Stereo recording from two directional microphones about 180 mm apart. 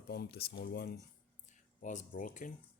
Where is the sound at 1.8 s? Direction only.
50° left (ahead or behind).